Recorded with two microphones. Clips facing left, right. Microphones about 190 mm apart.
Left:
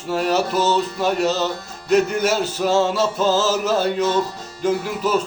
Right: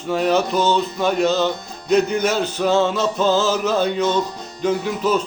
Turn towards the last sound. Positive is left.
turn(degrees=5)  # may be behind; listen again after turning